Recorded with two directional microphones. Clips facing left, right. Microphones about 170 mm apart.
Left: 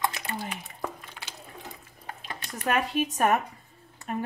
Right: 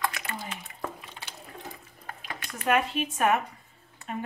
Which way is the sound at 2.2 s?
35° left (ahead or behind).